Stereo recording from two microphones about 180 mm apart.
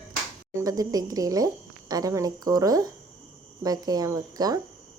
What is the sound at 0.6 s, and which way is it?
Speech, 20° right (ahead or behind).